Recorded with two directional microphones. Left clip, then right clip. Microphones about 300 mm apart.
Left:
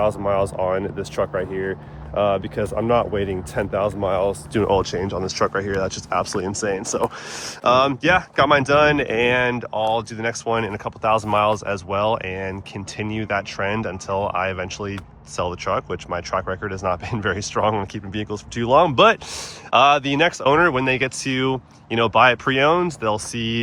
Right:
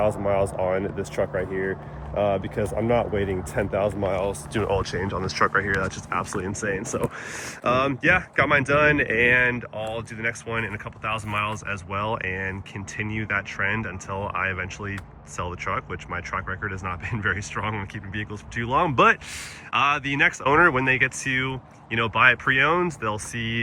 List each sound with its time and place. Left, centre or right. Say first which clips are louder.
0.0 s speech: left 3 dB; centre
4.2 s speech: left 5 dB; left
4.8 s speech: left 4 dB; centre